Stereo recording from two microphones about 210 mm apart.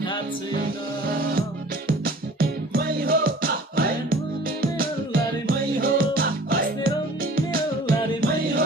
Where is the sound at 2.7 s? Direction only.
45° right (ahead or behind).